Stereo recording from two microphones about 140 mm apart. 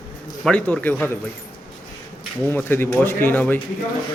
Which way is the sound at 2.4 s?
15° left (ahead or behind).